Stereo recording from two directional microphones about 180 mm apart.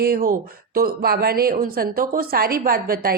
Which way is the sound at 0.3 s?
55° right (ahead or behind).